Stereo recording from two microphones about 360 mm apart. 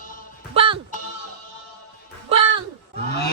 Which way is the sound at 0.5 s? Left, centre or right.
Centre.